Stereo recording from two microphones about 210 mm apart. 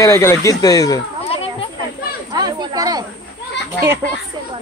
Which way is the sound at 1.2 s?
25° left (ahead or behind).